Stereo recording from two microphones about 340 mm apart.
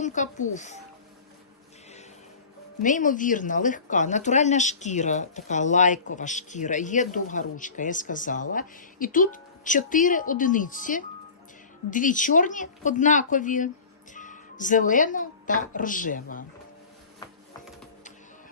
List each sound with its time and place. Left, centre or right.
0.0 s speech: left
2.8 s speech: left
17.2 s music: centre